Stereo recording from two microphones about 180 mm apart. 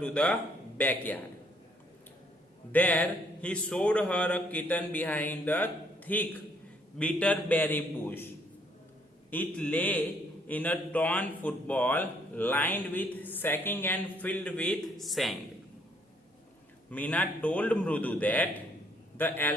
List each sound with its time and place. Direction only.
0.0 s speech: 5° left (ahead or behind)
2.7 s speech: 10° left (ahead or behind)
9.3 s speech: 10° left (ahead or behind)
16.9 s a man's voice: 10° left (ahead or behind)